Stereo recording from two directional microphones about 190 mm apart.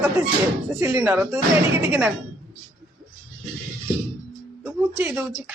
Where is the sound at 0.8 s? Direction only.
10° right (ahead or behind).